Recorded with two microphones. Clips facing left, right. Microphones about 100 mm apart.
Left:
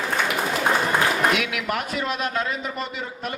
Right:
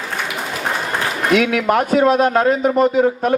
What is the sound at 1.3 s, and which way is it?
A man's voice, 45° right (ahead or behind).